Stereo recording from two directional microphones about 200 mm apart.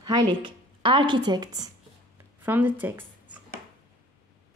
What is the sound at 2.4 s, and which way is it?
Speech, 10° right (ahead or behind).